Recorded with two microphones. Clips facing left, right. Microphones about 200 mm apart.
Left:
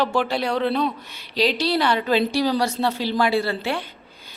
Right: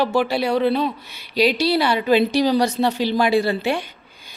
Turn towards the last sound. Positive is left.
turn(degrees=-15)  # may be behind; listen again after turning